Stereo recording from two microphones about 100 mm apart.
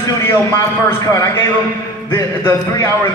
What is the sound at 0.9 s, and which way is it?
A man's voice, 30° left (ahead or behind).